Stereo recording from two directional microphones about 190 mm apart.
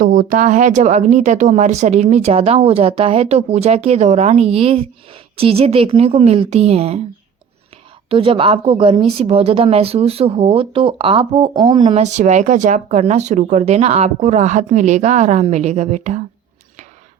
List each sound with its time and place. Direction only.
0.0 s a woman's voice: 45° right (ahead or behind)
8.1 s a woman's voice: 30° right (ahead or behind)